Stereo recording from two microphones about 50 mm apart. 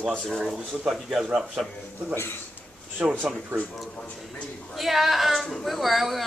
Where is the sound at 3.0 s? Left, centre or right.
Right.